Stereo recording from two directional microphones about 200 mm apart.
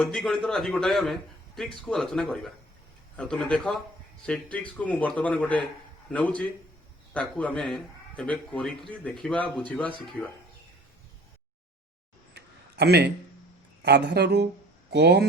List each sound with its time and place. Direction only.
0.0 s a man's voice: centre (ahead or behind)
12.3 s a sound: 55° right (ahead or behind)
13.8 s speech: 55° right (ahead or behind)